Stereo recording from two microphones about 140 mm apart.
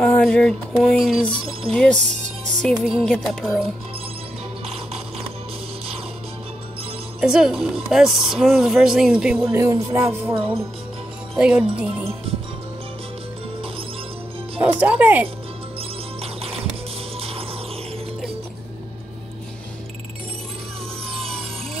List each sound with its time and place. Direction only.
0.0 s speech: 5° left (ahead or behind)
7.2 s speech: 5° right (ahead or behind)
9.5 s music: 20° right (ahead or behind)
10.3 s speech: 45° right (ahead or behind)
11.3 s speech: 10° right (ahead or behind)
14.6 s speech: 10° right (ahead or behind)
16.2 s music: 45° right (ahead or behind)
17.2 s a sound: 45° right (ahead or behind)